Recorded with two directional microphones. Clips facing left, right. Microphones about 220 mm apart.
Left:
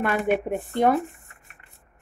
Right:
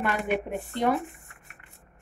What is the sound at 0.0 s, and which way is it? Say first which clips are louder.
Speech: left 4 dB; 50° left (ahead or behind).